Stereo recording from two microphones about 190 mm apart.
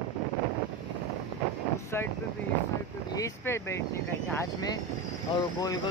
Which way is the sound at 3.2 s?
15° left (ahead or behind).